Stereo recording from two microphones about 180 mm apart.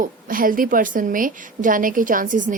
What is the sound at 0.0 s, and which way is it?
A woman's voice, 50° right (ahead or behind).